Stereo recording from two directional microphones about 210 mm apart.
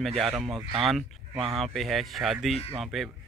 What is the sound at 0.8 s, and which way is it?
Speech, centre (ahead or behind).